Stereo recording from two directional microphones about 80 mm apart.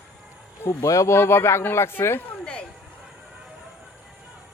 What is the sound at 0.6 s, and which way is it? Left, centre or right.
Speech, left.